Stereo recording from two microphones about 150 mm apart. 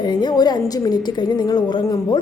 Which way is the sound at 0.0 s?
30° left (ahead or behind).